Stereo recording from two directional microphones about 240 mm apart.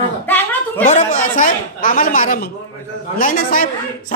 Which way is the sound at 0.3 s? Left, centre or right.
Centre.